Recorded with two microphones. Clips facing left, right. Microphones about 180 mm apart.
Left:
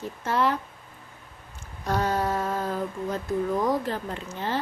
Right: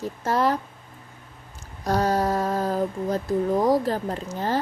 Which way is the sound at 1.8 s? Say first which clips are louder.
Right 3 dB; 40° right (ahead or behind).